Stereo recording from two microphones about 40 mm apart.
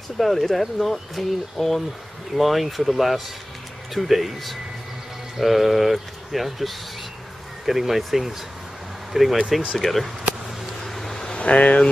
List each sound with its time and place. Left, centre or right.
0.2 s speech: centre
9.8 s speech: centre
10.8 s vehicle: centre
11.3 s speech: left